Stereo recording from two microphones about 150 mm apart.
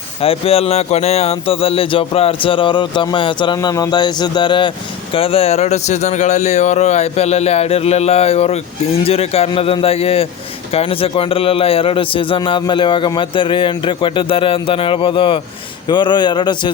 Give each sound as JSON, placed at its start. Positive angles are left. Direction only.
{"t": 0.2, "sound": "a man's voice", "side_deg": 40}